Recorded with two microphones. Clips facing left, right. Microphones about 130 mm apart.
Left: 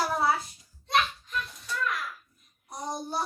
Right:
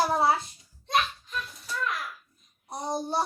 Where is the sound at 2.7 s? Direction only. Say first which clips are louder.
Right 4 dB; 30° right (ahead or behind).